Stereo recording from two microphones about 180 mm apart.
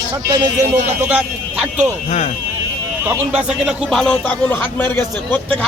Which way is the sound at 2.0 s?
35° left (ahead or behind).